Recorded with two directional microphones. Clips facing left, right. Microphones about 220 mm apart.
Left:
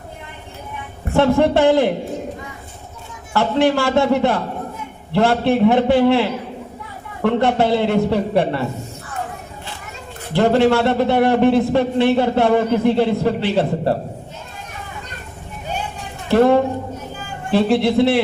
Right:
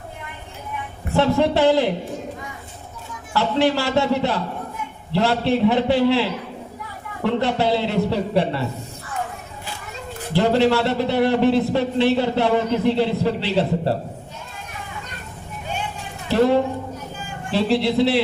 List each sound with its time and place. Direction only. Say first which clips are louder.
1.1 s a man's voice: left 3 dB; 50° left (ahead or behind)
3.3 s a man's voice: left 3 dB; 50° left (ahead or behind)
7.3 s a man's voice: left 4 dB; 55° left (ahead or behind)
10.3 s a man's voice: left 3 dB; 50° left (ahead or behind)
16.3 s a man's voice: left 4 dB; 55° left (ahead or behind)